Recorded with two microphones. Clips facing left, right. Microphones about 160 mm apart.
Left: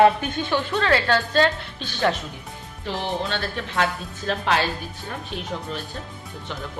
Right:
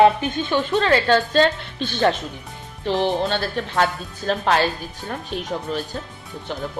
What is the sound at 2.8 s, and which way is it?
Speech, 35° right (ahead or behind).